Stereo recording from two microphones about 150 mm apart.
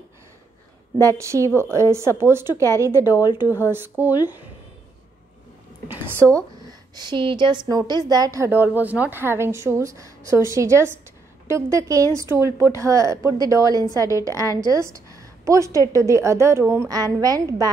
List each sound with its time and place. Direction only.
1.0 s a woman's voice: 20° right (ahead or behind)
5.9 s a sound: 15° right (ahead or behind)
7.0 s a woman's voice: 30° right (ahead or behind)